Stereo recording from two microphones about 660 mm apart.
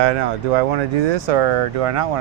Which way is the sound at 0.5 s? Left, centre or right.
Right.